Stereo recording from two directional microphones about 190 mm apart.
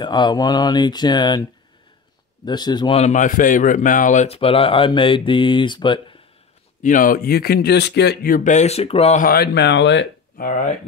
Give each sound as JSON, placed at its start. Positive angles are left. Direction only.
{"t": 0.0, "sound": "speech", "side_deg": 25}
{"t": 2.4, "sound": "speech", "side_deg": 20}
{"t": 3.0, "sound": "speech", "side_deg": 40}
{"t": 6.8, "sound": "speech", "side_deg": 45}
{"t": 10.4, "sound": "speech", "side_deg": 45}